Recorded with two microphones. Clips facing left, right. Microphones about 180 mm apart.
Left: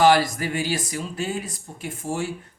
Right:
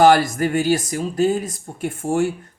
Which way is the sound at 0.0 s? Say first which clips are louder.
Right 4 dB; 50° right (ahead or behind).